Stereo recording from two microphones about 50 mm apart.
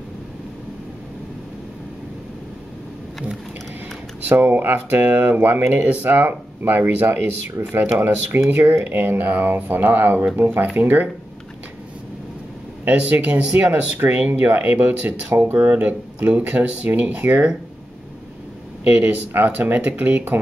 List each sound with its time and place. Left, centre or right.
4.3 s speech: right
12.8 s speech: right
18.9 s speech: right